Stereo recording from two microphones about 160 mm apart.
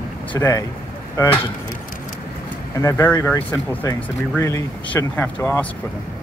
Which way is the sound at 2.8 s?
20° left (ahead or behind).